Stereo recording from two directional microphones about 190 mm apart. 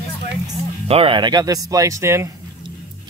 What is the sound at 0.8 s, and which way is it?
Speech, 30° right (ahead or behind).